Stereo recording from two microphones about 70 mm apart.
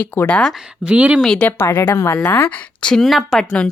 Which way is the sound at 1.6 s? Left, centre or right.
Left.